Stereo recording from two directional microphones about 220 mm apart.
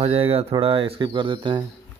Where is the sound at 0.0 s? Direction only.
30° right (ahead or behind).